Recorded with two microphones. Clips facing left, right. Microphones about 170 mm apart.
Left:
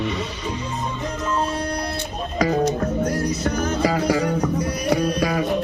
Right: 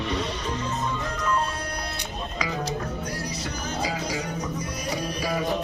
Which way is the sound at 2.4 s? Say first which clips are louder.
Left 11 dB; 45° left (ahead or behind).